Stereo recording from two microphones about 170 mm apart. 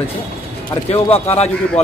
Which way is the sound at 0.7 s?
35° left (ahead or behind).